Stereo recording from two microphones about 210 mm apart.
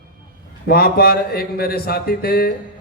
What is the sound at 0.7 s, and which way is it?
A man's voice, 45° left (ahead or behind).